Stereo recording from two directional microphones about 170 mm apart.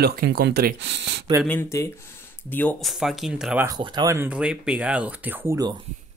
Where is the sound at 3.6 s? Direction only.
25° right (ahead or behind).